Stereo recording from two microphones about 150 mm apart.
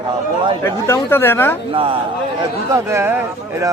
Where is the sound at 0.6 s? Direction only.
15° left (ahead or behind).